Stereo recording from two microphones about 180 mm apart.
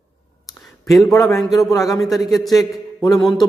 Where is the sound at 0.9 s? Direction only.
Centre (ahead or behind).